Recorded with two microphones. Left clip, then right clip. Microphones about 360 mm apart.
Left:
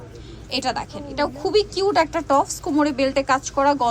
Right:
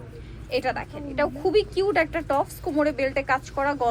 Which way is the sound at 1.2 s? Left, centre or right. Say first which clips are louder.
Left 2 dB; left.